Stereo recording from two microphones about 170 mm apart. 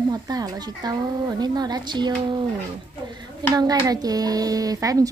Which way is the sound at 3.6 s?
20° right (ahead or behind).